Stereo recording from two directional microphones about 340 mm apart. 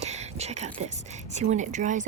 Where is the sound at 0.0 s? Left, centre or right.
Centre.